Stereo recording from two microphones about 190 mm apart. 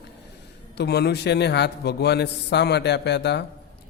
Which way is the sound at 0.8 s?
60° left (ahead or behind).